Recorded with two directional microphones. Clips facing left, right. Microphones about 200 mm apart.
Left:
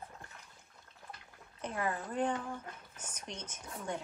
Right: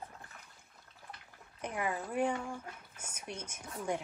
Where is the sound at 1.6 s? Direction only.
15° right (ahead or behind).